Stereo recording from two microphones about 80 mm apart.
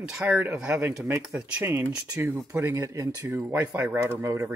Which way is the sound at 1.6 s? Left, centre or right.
Right.